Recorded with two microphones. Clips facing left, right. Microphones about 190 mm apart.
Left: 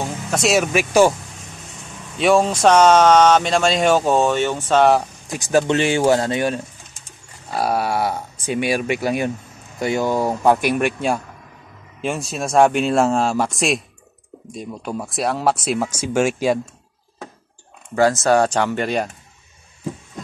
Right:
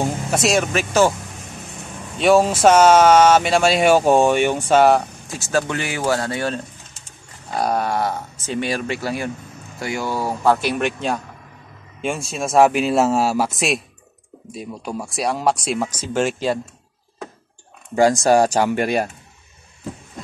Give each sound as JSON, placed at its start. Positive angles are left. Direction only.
{"t": 0.0, "sound": "a sound", "side_deg": -10}
{"t": 0.5, "sound": "speech", "side_deg": 10}
{"t": 2.1, "sound": "speech", "side_deg": 0}
{"t": 5.3, "sound": "speech", "side_deg": 15}
{"t": 17.9, "sound": "speech", "side_deg": -15}